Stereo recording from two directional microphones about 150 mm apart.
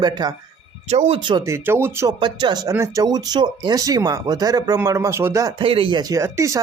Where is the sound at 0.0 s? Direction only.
30° right (ahead or behind).